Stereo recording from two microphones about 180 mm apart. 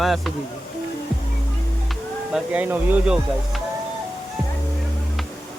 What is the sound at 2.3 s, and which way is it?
Speech, 10° right (ahead or behind).